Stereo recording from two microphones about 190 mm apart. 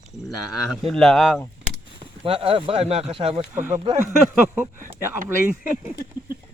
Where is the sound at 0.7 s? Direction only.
Centre (ahead or behind).